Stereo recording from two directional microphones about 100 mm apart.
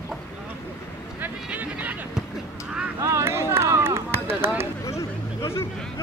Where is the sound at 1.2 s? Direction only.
15° right (ahead or behind).